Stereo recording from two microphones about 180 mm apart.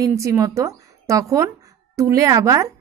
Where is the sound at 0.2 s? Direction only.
15° right (ahead or behind).